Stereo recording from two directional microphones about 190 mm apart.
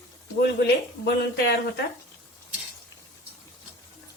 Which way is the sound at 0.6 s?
60° left (ahead or behind).